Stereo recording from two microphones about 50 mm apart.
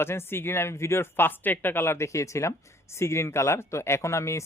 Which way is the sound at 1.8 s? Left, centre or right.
Left.